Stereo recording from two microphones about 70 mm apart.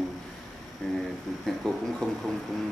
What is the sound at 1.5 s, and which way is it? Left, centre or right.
Speech, centre.